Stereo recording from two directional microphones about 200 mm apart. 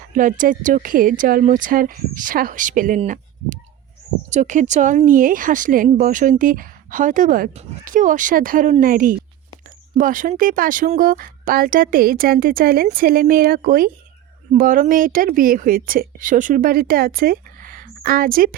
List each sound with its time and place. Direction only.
0.2 s speech: 40° right (ahead or behind)